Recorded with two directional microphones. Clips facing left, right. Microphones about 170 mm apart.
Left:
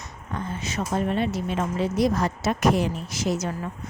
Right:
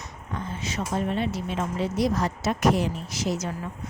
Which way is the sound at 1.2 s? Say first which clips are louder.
Left 2 dB; 50° left (ahead or behind).